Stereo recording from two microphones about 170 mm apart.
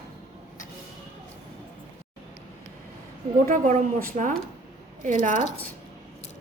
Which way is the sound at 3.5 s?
50° right (ahead or behind).